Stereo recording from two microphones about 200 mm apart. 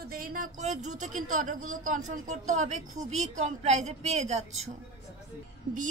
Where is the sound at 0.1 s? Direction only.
45° right (ahead or behind).